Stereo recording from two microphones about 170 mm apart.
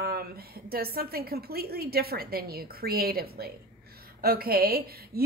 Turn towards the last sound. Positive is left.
turn(degrees=-65)  # may be behind; listen again after turning